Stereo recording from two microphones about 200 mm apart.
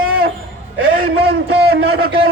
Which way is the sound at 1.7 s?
85° right.